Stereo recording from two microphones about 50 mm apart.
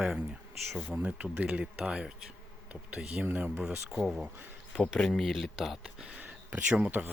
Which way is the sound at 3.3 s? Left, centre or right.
Right.